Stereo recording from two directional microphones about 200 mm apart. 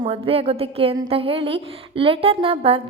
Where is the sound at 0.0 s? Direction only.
30° right (ahead or behind).